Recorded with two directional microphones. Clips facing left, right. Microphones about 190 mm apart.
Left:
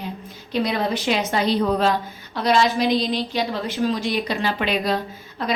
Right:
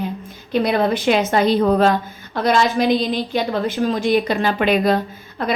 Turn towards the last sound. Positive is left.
turn(degrees=-55)  # may be behind; listen again after turning